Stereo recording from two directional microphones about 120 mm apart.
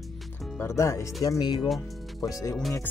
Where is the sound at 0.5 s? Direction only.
25° left (ahead or behind).